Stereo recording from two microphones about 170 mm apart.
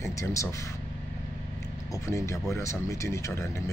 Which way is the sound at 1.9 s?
20° left (ahead or behind).